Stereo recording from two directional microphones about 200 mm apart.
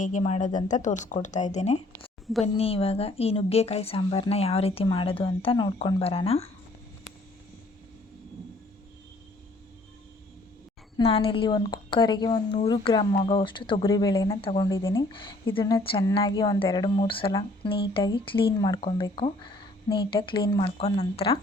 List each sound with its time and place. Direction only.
0.0 s a woman's voice: 35° left (ahead or behind)
11.0 s a woman's voice: 30° left (ahead or behind)